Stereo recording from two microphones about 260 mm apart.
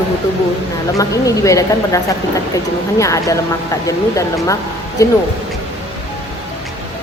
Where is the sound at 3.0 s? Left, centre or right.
Centre.